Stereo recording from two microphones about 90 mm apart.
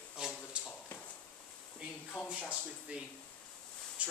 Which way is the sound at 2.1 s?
15° left (ahead or behind).